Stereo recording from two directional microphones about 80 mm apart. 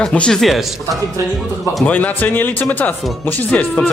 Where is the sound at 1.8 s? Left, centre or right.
Left.